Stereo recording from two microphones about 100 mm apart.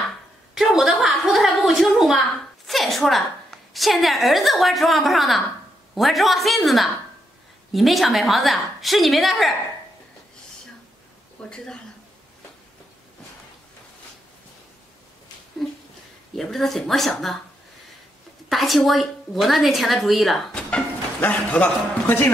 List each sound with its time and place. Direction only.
0.6 s a sound: 5° right (ahead or behind)
3.7 s a woman's voice: centre (ahead or behind)
11.4 s a man's voice: 10° left (ahead or behind)
16.3 s a woman's voice: 5° left (ahead or behind)
18.5 s a woman's voice: centre (ahead or behind)
21.2 s a man's voice: 15° left (ahead or behind)